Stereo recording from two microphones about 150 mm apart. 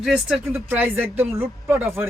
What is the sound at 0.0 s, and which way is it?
Speech, 5° right (ahead or behind).